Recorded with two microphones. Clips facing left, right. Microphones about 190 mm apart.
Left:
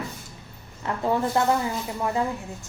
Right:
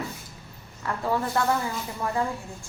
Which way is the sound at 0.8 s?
20° left (ahead or behind).